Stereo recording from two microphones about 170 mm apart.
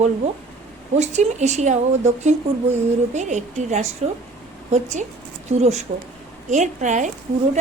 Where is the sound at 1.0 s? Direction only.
40° right (ahead or behind).